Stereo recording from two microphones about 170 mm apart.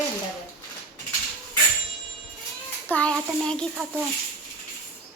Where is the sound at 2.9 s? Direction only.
10° left (ahead or behind).